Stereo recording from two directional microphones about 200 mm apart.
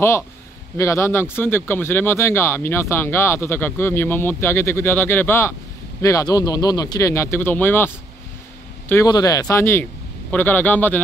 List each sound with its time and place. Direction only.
0.7 s speech: 15° left (ahead or behind)